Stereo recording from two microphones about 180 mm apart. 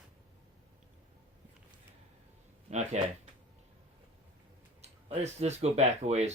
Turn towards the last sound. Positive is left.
turn(degrees=-35)  # may be behind; listen again after turning